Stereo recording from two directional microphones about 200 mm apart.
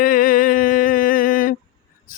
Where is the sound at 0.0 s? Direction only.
45° left (ahead or behind).